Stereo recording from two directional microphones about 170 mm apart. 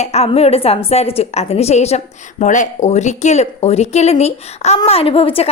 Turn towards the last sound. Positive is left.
turn(degrees=35)  # may be behind; listen again after turning